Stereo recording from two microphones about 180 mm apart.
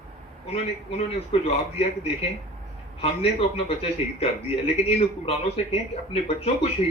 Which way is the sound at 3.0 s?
35° left (ahead or behind).